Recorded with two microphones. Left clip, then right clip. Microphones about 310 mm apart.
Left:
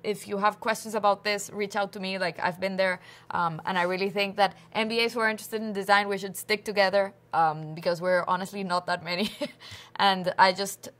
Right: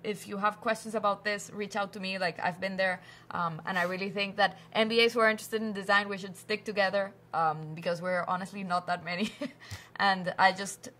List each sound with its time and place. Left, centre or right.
0.0 s a woman's voice: left
4.7 s a woman's voice: left